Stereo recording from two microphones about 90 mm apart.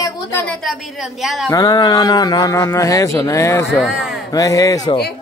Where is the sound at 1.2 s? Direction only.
5° right (ahead or behind).